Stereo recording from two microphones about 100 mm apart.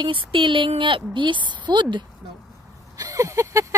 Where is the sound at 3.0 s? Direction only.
35° right (ahead or behind).